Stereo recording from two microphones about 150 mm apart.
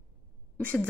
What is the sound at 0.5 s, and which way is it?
Speech, 10° left (ahead or behind).